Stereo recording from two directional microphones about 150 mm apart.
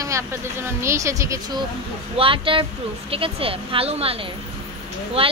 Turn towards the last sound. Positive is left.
turn(degrees=-40)  # may be behind; listen again after turning